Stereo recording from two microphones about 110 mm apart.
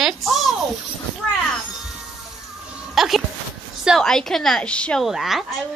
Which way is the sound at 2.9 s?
Centre (ahead or behind).